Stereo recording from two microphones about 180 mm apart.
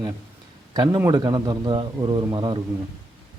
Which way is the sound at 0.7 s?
25° right (ahead or behind).